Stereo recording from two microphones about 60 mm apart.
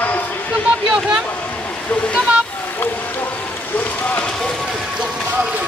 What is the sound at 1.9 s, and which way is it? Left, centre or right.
Speech, centre.